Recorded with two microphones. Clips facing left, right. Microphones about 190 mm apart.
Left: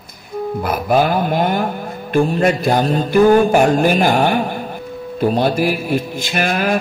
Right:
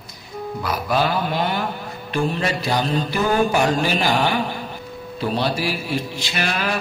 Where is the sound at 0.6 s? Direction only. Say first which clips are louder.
Left 5 dB; 50° left (ahead or behind).